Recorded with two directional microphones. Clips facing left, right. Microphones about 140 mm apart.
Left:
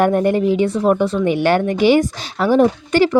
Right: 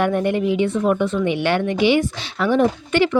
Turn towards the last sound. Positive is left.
turn(degrees=40)  # may be behind; listen again after turning